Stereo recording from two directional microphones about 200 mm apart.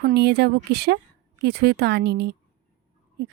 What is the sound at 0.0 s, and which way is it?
Speech, 55° right (ahead or behind).